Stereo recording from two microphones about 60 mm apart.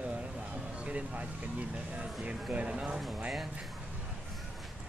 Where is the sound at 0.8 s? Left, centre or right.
Centre.